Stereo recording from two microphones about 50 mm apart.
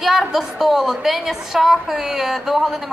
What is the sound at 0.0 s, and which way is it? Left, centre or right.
A woman's voice, centre.